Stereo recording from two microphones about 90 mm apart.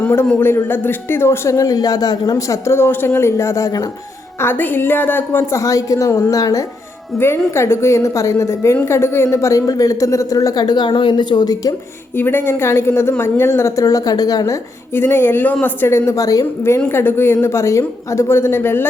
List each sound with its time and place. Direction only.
0.3 s a woman's voice: 25° left (ahead or behind); by 2.6 s 45° left (ahead or behind)
2.6 s a woman's voice: 25° left (ahead or behind)
7.2 s a woman's voice: 30° left (ahead or behind); by 11.7 s 50° left (ahead or behind)
12.1 s a woman's voice: 20° left (ahead or behind); by 14.6 s 40° left (ahead or behind)
14.9 s a woman's voice: 25° left (ahead or behind)